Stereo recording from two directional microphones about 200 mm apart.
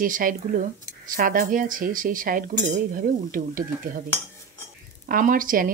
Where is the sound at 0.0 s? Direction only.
45° right (ahead or behind).